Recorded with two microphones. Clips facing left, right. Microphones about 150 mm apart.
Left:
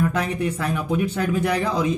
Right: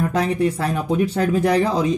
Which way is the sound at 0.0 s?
35° right (ahead or behind).